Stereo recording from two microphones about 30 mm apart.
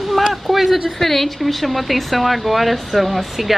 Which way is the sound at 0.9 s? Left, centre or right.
Centre.